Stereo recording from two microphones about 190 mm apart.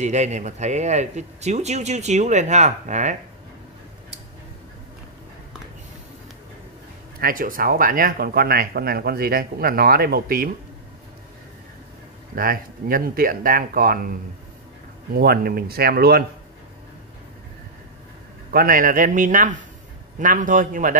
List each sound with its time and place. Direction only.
0.0 s speech: 40° right (ahead or behind)
7.2 s speech: 50° right (ahead or behind)
12.4 s speech: 50° right (ahead or behind)
15.1 s speech: 55° right (ahead or behind)
18.5 s speech: 50° right (ahead or behind)